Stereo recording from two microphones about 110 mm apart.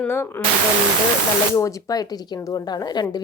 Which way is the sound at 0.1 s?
20° left (ahead or behind).